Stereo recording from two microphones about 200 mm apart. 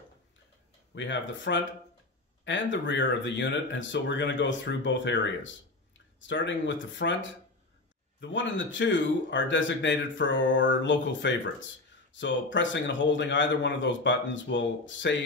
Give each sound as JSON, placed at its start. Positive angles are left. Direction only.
{"t": 0.9, "sound": "speech", "side_deg": 65}